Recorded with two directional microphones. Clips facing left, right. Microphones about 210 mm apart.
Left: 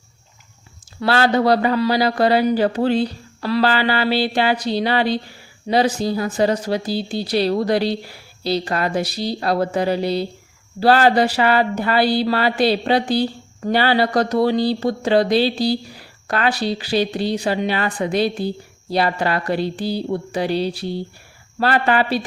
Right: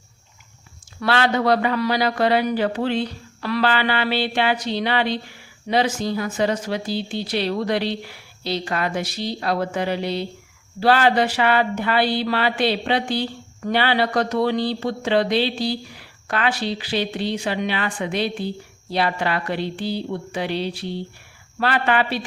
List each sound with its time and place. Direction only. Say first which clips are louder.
0.9 s speech: left 3 dB; 35° left (ahead or behind)